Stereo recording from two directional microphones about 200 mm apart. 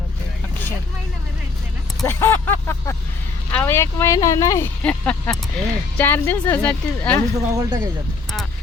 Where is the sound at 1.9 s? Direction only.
5° left (ahead or behind).